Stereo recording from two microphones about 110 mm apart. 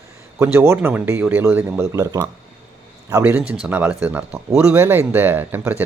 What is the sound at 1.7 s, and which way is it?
Speech, 30° right (ahead or behind).